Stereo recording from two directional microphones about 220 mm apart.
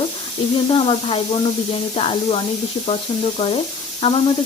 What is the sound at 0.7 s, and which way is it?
Speech, 25° left (ahead or behind).